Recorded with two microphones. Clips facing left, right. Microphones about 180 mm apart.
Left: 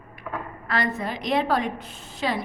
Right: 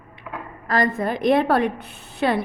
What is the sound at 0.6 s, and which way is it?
A woman's voice, 45° right (ahead or behind).